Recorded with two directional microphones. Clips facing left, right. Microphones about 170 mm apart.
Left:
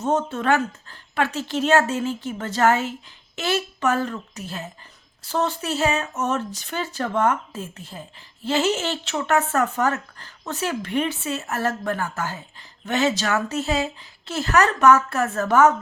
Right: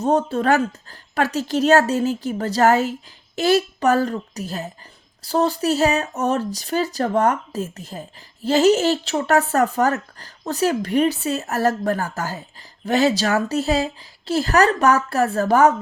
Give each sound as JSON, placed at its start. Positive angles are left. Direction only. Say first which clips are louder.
{"t": 0.0, "sound": "speech", "louder": "right 4 dB", "side_deg": -35}